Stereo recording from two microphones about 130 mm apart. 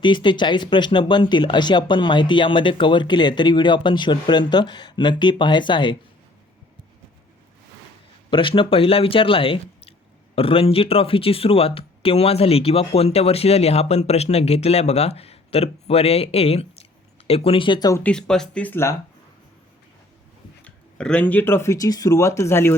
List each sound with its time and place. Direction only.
0.0 s speech: 40° left (ahead or behind)
8.3 s speech: 40° left (ahead or behind)
17.9 s speech: 10° left (ahead or behind)
20.7 s speech: 10° left (ahead or behind)